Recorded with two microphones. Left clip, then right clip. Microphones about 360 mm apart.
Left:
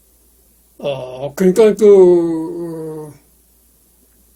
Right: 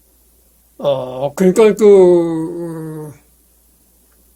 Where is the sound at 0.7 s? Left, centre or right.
Right; by 3.1 s centre.